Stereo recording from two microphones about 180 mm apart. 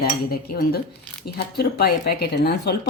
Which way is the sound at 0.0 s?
55° left (ahead or behind).